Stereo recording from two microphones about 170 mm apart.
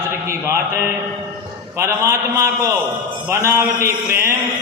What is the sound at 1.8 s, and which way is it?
A man's voice, 15° right (ahead or behind).